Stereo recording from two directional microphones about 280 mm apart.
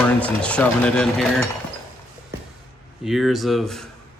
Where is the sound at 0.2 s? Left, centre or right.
Centre.